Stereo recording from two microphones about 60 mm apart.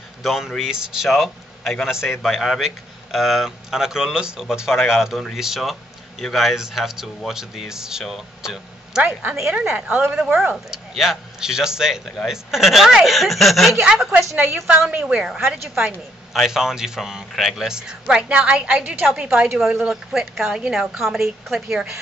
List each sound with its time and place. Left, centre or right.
0.2 s a man's voice: centre
14.1 s a woman's voice: right
15.1 s speech: centre